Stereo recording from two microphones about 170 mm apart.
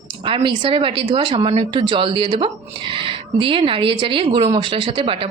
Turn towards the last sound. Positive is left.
turn(degrees=-30)  # may be behind; listen again after turning